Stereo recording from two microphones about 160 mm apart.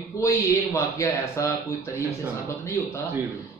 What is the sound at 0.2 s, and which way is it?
A man's voice, 20° left (ahead or behind).